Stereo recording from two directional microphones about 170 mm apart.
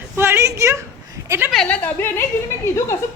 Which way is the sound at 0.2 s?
15° right (ahead or behind).